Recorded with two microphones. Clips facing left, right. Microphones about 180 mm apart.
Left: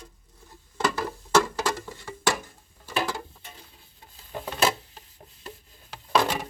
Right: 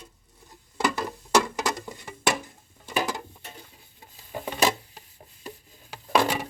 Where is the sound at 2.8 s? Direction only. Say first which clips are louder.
Right 1 dB; 15° right (ahead or behind).